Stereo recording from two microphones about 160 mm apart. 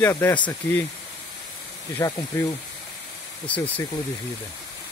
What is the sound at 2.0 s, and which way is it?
Speech, 20° left (ahead or behind).